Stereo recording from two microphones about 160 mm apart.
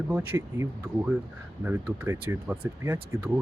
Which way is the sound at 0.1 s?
15° right (ahead or behind).